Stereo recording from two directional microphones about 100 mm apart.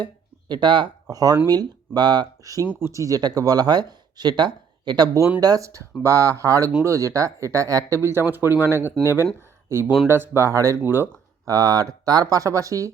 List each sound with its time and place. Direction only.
0.0 s a sound: 50° right (ahead or behind)
1.0 s speech: 40° right (ahead or behind)
5.4 s speech: 35° right (ahead or behind); by 11.1 s 20° right (ahead or behind)
11.4 s speech: 35° right (ahead or behind)